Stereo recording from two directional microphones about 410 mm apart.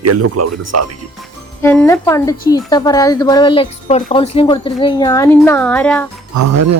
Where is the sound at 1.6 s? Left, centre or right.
Centre.